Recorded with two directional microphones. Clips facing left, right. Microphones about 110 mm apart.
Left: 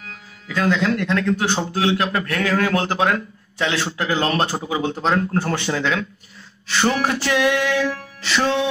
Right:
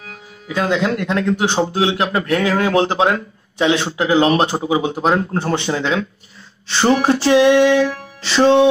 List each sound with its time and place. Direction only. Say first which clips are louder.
0.5 s speech: right 2 dB; 20° right (ahead or behind)